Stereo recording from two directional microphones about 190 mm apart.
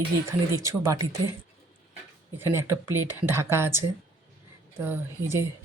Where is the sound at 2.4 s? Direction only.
15° right (ahead or behind).